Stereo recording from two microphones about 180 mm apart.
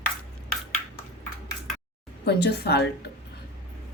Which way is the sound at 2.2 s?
65° left (ahead or behind).